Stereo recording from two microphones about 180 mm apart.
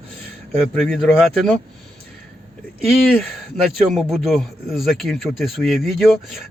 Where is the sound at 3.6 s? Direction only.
Centre (ahead or behind).